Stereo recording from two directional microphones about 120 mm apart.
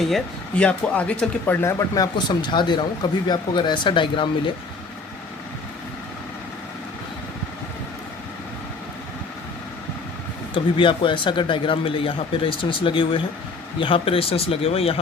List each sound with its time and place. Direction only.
0.0 s speech: 5° left (ahead or behind)
1.6 s speech: 35° left (ahead or behind)
10.5 s speech: 45° left (ahead or behind)